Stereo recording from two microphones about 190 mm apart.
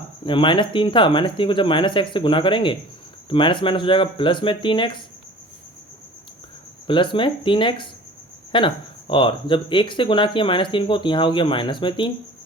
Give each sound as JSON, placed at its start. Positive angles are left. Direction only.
{"t": 0.3, "sound": "speech", "side_deg": 25}
{"t": 6.8, "sound": "speech", "side_deg": 25}